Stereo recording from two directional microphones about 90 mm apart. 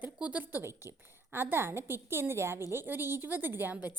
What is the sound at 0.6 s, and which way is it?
A woman's voice, 25° right (ahead or behind).